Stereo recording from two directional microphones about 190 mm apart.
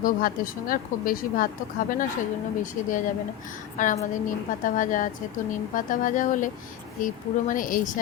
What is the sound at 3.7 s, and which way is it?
A woman's voice, 40° left (ahead or behind).